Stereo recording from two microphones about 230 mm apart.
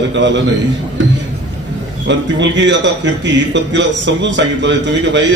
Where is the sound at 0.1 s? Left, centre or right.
Right.